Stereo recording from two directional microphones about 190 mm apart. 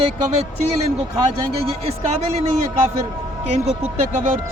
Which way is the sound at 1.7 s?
30° right (ahead or behind).